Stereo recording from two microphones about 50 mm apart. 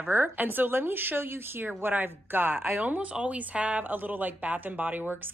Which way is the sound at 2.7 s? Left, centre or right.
Right.